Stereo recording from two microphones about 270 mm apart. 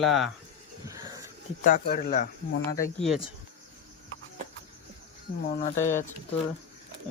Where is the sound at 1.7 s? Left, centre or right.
Left.